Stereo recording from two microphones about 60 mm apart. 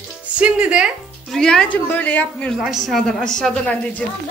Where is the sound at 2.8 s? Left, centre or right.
Centre.